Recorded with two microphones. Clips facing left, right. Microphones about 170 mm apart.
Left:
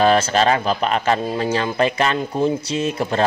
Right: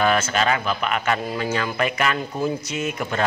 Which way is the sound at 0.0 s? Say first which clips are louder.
Left 5 dB; 30° left (ahead or behind).